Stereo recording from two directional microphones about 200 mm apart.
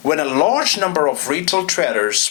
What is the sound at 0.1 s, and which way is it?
Speech, 5° left (ahead or behind).